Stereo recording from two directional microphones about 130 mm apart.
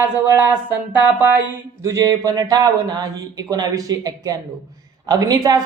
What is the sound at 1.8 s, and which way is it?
Speech, 25° right (ahead or behind).